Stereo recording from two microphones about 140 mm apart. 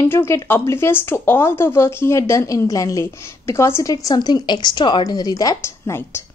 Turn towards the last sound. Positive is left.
turn(degrees=20)  # may be behind; listen again after turning